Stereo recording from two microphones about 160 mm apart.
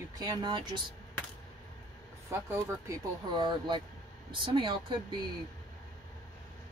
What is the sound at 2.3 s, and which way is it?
Speech, 15° right (ahead or behind).